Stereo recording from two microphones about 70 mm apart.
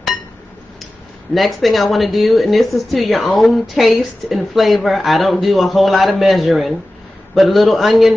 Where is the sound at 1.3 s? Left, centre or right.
Centre.